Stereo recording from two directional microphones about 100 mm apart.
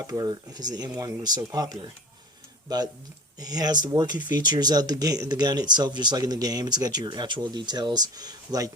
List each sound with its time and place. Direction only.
0.1 s speech: 40° right (ahead or behind)